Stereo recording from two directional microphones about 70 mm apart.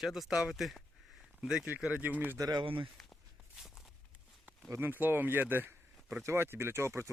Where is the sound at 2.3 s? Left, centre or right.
Right.